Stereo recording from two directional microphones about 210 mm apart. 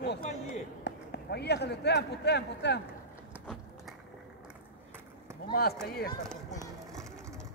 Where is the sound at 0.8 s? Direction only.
50° left (ahead or behind).